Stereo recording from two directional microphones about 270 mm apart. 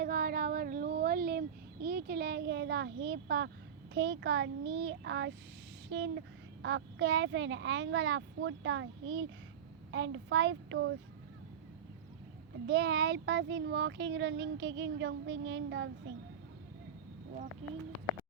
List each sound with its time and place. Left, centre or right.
0.0 s child singing: right
3.9 s speech: right
12.6 s speech: right